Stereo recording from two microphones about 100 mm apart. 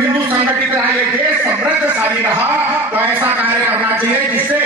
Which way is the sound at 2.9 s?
20° right (ahead or behind).